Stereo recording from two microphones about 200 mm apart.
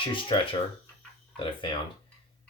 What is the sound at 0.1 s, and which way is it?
Speech, 25° left (ahead or behind).